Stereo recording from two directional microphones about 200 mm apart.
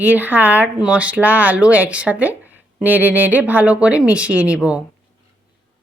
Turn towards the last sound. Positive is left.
turn(degrees=-5)  # may be behind; listen again after turning